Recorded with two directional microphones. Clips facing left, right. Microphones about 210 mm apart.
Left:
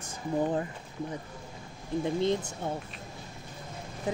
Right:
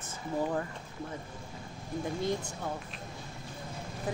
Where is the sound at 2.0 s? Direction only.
20° left (ahead or behind).